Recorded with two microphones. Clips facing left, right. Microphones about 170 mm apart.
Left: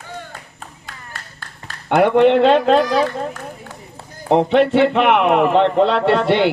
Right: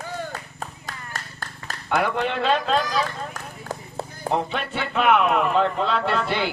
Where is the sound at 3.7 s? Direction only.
40° right (ahead or behind).